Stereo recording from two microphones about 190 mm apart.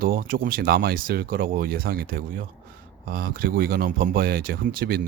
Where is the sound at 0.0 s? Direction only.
50° right (ahead or behind).